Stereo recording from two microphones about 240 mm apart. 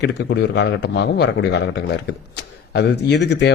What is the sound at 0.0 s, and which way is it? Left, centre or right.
A man's voice, left.